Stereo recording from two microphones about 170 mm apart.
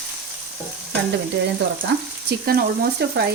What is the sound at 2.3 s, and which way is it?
Speech, 60° right (ahead or behind).